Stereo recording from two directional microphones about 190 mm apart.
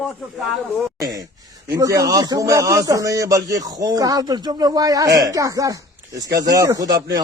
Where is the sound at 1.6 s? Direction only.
15° right (ahead or behind).